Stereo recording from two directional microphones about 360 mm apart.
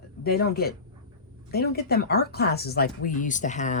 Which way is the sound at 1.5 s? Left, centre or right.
Left.